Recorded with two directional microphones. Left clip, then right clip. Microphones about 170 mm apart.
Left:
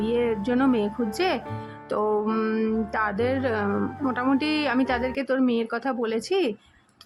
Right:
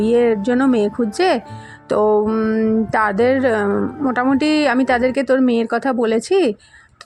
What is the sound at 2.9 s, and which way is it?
A woman's voice, 30° right (ahead or behind).